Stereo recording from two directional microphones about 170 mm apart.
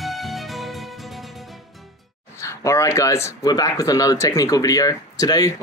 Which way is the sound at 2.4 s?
15° left (ahead or behind).